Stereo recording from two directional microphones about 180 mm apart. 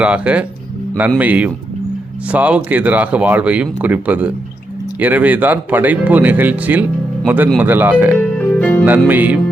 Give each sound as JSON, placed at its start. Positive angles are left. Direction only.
{"t": 0.0, "sound": "speech", "side_deg": -5}
{"t": 8.4, "sound": "music", "side_deg": 5}
{"t": 9.0, "sound": "speech", "side_deg": -10}